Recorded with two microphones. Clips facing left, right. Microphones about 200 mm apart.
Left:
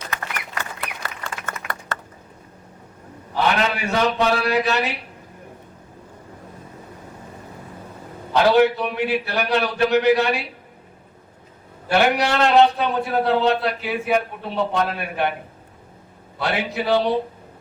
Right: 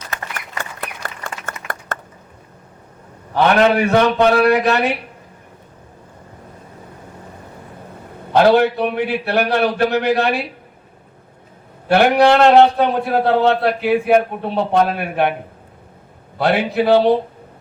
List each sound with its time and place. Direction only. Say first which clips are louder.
0.6 s a sound: right 2 dB; 50° right (ahead or behind)
3.3 s a man's voice: right 8 dB; 60° right (ahead or behind)
8.4 s a man's voice: right 3 dB; 55° right (ahead or behind)
11.9 s a man's voice: right 7 dB; 55° right (ahead or behind)
16.4 s a man's voice: right 7 dB; 60° right (ahead or behind)